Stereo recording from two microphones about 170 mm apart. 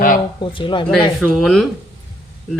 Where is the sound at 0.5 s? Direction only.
30° left (ahead or behind).